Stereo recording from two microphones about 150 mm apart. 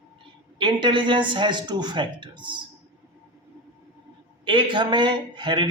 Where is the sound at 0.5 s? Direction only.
30° right (ahead or behind).